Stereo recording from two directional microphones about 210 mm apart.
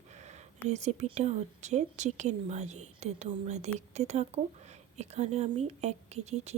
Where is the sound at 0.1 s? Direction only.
35° right (ahead or behind).